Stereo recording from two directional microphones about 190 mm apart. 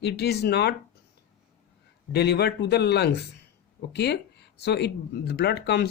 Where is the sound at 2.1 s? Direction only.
60° left (ahead or behind).